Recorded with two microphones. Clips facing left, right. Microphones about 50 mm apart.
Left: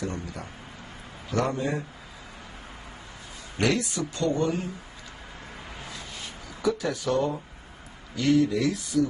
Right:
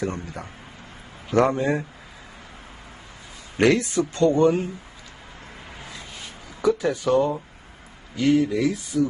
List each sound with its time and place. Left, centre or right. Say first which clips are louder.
0.0 s speech: right 4 dB; right
3.6 s speech: right 7 dB; right
5.9 s a sound: right 1 dB; right
6.8 s speech: right 5 dB; right